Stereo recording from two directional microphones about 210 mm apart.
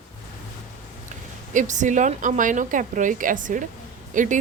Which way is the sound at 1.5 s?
35° right (ahead or behind).